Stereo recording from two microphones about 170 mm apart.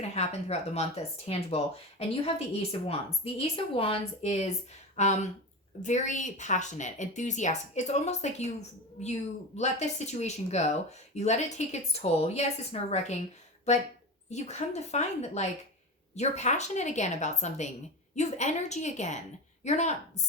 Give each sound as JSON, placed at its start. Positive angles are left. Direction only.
{"t": 0.1, "sound": "speech", "side_deg": 40}
{"t": 9.6, "sound": "speech", "side_deg": 40}
{"t": 14.3, "sound": "speech", "side_deg": 40}